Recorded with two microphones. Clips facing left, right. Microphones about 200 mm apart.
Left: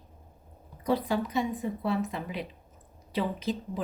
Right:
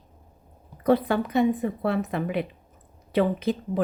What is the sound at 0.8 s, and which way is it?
Speech, 60° right (ahead or behind).